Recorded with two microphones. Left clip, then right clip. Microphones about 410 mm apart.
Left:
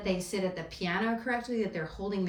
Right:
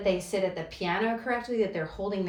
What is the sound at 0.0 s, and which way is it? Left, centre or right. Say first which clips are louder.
A woman's voice: right 5 dB; centre.